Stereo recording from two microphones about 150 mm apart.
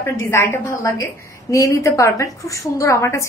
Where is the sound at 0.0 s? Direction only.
20° left (ahead or behind).